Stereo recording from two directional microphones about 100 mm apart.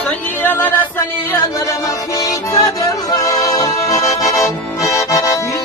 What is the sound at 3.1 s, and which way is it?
Accordion, 40° left (ahead or behind).